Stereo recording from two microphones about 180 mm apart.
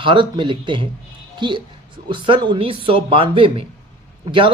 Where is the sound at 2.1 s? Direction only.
25° right (ahead or behind).